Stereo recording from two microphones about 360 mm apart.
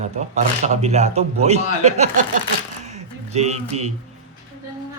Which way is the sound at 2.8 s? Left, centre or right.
Centre.